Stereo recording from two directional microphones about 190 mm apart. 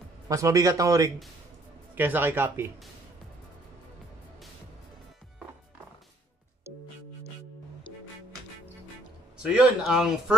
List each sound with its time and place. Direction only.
0.3 s speech: 15° right (ahead or behind)
9.4 s speech: 5° right (ahead or behind)